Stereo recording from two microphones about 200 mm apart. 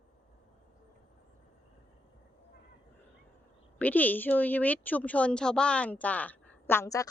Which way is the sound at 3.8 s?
10° left (ahead or behind).